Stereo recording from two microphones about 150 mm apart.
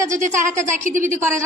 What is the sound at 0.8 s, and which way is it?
Speech, 60° right (ahead or behind).